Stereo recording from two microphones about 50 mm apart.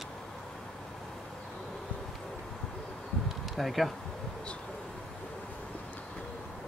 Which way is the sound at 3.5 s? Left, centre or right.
Centre.